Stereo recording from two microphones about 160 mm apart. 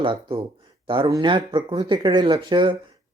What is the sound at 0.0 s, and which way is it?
Speech, 35° right (ahead or behind).